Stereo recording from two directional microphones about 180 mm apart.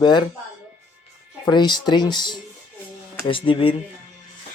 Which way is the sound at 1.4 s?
25° left (ahead or behind).